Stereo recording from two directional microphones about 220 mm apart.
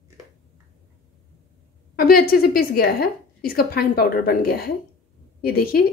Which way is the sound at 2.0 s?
40° left (ahead or behind).